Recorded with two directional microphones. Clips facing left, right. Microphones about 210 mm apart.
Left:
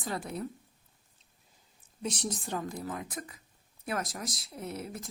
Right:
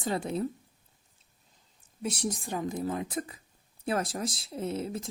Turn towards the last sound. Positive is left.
turn(degrees=-25)  # may be behind; listen again after turning